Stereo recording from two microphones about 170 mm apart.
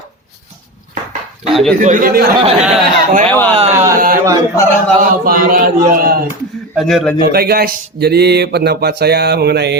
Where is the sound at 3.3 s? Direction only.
10° left (ahead or behind).